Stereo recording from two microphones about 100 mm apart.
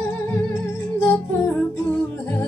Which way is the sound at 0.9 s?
25° left (ahead or behind).